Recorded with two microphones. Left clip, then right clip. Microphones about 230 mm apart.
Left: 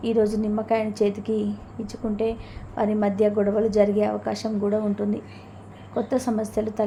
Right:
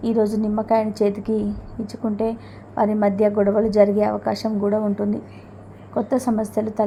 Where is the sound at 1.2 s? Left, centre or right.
Centre.